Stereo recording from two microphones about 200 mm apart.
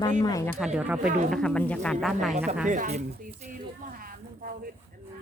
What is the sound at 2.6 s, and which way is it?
Speech, 40° right (ahead or behind).